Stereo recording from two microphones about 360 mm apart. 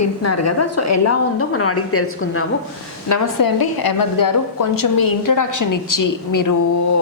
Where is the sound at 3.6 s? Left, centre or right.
Left.